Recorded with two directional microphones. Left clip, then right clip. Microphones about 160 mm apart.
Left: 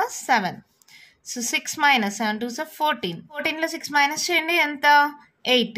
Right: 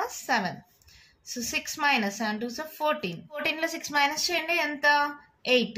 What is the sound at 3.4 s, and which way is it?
A woman's voice, 35° left (ahead or behind).